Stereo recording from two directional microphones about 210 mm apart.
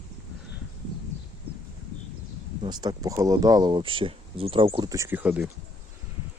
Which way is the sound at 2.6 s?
20° right (ahead or behind).